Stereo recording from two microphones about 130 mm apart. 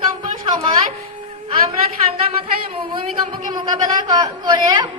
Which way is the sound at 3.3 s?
35° right (ahead or behind).